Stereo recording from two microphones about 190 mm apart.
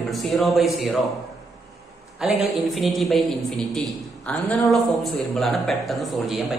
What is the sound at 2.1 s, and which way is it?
A man's voice, centre (ahead or behind).